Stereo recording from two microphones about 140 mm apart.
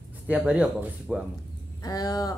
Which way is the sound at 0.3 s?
10° right (ahead or behind).